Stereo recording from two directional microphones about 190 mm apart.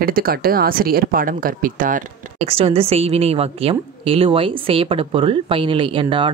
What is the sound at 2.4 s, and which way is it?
A woman's voice, 30° right (ahead or behind).